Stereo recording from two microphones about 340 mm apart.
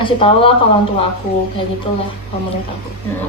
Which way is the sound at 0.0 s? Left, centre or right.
Centre.